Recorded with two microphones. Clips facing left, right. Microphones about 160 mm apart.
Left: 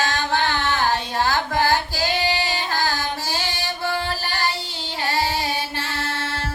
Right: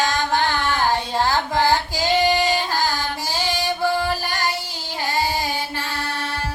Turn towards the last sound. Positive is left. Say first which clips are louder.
# even
turn(degrees=-15)  # may be behind; listen again after turning